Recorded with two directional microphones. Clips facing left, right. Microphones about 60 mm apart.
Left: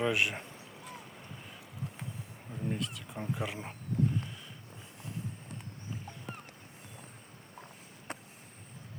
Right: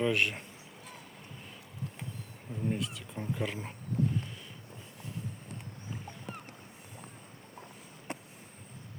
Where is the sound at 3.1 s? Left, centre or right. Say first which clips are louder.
Right 2 dB; centre.